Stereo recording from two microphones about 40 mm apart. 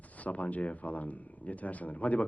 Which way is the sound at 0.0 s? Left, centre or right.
Left.